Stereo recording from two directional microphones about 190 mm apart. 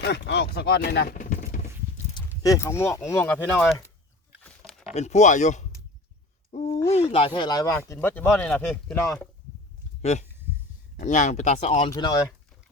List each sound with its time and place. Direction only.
0.0 s speech: 65° left (ahead or behind); by 1.7 s 40° left (ahead or behind)
2.1 s speech: 20° left (ahead or behind)
4.6 s a sound: centre (ahead or behind)
4.9 s speech: 35° left (ahead or behind); by 9.1 s 15° left (ahead or behind)
10.0 s speech: 35° left (ahead or behind)
11.9 s speech: 20° left (ahead or behind)